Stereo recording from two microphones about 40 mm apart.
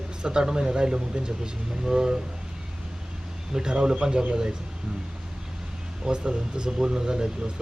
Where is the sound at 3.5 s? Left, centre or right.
Right.